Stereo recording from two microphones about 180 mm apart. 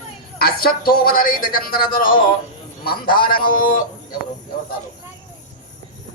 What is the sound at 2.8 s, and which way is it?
A man's voice, 55° left (ahead or behind).